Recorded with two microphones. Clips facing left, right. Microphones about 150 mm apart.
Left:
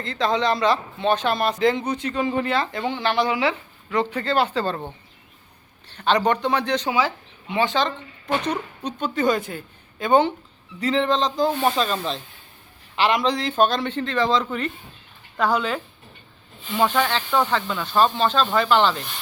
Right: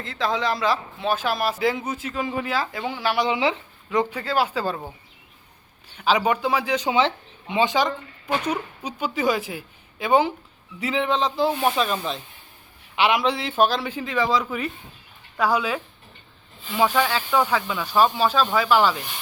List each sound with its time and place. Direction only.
0.0 s a man's voice: centre (ahead or behind)
3.2 s speech: 25° right (ahead or behind)
3.9 s speech: 10° right (ahead or behind)
6.9 s a man's voice: 25° right (ahead or behind)